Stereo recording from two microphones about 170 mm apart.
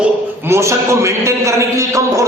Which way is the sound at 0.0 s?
15° right (ahead or behind).